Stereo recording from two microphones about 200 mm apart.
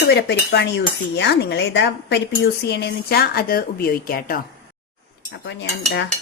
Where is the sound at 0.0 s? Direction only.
55° left (ahead or behind).